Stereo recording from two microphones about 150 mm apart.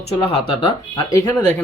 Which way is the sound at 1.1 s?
15° left (ahead or behind).